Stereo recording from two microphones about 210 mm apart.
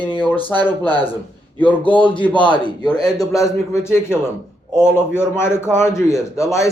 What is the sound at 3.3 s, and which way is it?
A man's voice, 15° left (ahead or behind).